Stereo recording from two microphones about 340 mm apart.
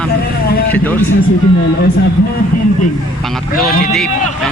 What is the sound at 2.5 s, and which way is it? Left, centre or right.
Vehicle, left.